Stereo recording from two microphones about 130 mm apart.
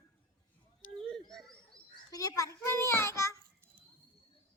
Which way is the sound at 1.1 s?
5° left (ahead or behind).